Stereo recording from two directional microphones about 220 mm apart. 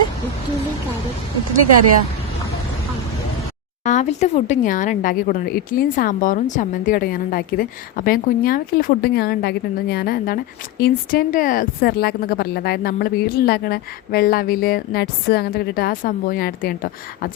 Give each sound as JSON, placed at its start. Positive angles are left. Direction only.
{"t": 3.8, "sound": "speech", "side_deg": 30}